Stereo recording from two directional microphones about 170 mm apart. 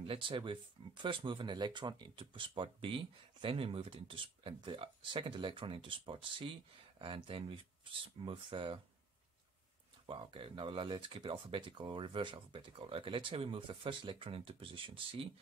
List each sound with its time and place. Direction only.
0.0 s speech: 30° right (ahead or behind)
10.0 s speech: 30° right (ahead or behind)